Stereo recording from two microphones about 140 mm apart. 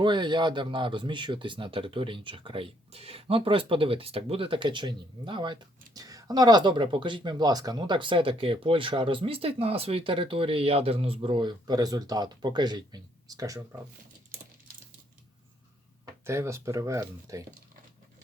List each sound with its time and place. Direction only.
0.0 s speech: 35° right (ahead or behind)
16.0 s speech: 20° right (ahead or behind)